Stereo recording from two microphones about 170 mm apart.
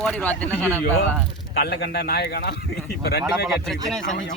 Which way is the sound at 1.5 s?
70° left (ahead or behind).